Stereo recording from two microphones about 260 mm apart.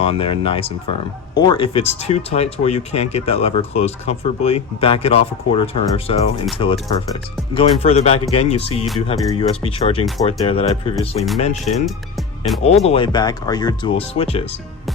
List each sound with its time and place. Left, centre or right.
0.0 s speech: left
7.5 s speech: left